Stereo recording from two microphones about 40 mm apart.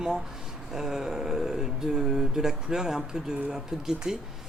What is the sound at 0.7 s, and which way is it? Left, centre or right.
Speech, centre.